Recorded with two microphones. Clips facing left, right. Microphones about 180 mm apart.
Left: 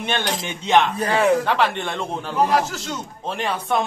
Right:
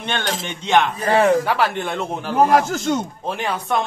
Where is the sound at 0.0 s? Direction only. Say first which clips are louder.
Even; 5° left (ahead or behind).